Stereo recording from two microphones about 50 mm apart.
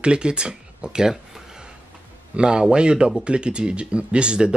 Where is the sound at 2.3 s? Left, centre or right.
Centre.